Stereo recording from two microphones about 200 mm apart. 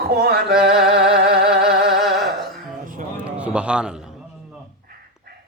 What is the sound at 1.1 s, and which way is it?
Music, 50° right (ahead or behind).